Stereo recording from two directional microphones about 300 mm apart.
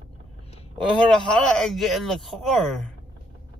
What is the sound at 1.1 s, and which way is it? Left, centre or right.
Speech, centre.